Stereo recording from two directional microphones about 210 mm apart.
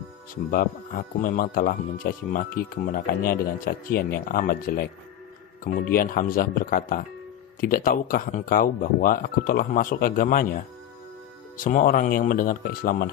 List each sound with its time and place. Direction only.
0.5 s speech: 40° left (ahead or behind)